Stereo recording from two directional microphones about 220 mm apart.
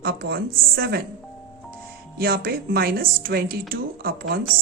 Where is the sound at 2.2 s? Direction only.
45° right (ahead or behind).